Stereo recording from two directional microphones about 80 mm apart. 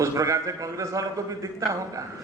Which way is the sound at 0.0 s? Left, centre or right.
Right.